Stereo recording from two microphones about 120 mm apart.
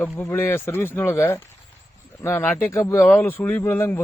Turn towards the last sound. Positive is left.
turn(degrees=20)  # may be behind; listen again after turning